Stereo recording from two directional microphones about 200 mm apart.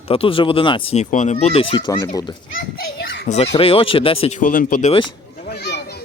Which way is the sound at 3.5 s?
25° left (ahead or behind).